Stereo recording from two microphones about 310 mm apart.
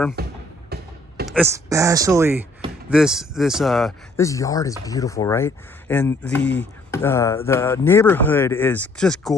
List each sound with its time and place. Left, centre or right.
0.2 s speech: right
0.7 s a sound: right
1.3 s speech: centre